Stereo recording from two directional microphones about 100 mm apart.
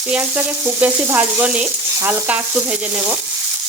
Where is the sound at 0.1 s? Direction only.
15° right (ahead or behind).